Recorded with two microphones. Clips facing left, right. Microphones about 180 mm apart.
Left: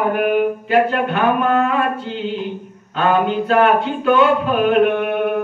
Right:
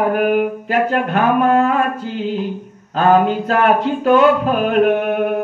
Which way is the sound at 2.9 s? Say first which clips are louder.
Right 3 dB; 40° right (ahead or behind).